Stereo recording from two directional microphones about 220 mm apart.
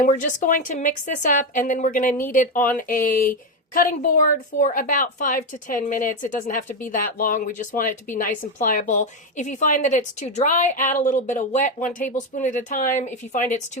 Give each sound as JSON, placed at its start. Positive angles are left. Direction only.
{"t": 0.0, "sound": "a woman's voice", "side_deg": 35}